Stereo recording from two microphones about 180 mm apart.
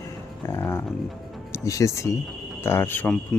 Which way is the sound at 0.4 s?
15° left (ahead or behind).